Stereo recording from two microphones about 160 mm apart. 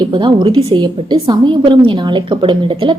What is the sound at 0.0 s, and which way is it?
A woman's voice, 30° right (ahead or behind).